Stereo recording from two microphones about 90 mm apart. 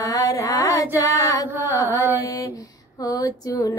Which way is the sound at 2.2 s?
40° left (ahead or behind).